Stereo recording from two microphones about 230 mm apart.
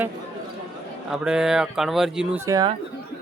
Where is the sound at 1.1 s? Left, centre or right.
Centre.